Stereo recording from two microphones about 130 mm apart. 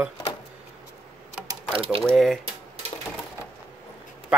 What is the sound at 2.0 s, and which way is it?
Speech, centre (ahead or behind).